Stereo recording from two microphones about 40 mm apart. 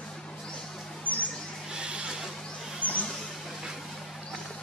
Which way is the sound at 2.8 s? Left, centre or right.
Right.